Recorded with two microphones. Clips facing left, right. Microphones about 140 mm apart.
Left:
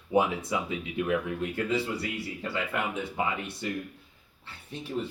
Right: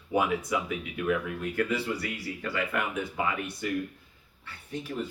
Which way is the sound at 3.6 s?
25° left (ahead or behind).